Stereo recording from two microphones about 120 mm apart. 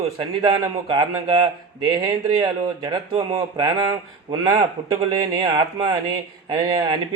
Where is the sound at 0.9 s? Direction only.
45° right (ahead or behind).